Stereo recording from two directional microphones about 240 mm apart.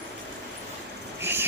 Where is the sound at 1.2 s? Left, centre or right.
Centre.